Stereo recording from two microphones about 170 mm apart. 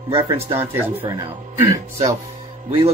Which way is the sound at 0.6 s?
10° right (ahead or behind).